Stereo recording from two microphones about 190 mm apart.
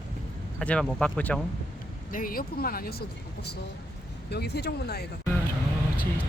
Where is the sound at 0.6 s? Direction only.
5° left (ahead or behind).